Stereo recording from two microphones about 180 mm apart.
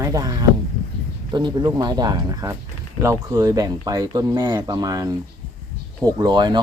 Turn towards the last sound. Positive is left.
turn(degrees=-25)  # may be behind; listen again after turning